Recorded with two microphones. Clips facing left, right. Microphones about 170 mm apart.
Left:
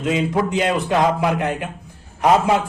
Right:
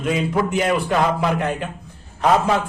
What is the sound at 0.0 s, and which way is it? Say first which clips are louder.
A man's voice: left 1 dB; 20° left (ahead or behind).